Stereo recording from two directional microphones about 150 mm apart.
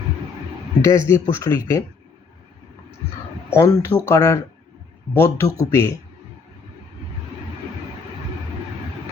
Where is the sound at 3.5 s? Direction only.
15° left (ahead or behind).